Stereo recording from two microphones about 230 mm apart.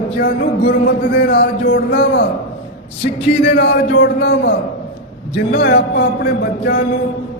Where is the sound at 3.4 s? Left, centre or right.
Left.